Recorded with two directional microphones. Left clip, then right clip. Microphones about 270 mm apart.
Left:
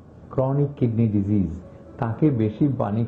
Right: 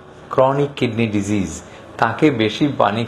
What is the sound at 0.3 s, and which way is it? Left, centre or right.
Speech, centre.